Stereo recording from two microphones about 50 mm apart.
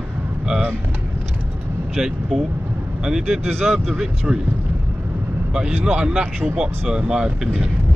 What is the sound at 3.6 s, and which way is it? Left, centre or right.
Speech, centre.